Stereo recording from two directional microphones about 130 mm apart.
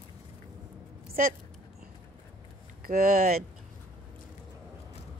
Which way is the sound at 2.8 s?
90° right.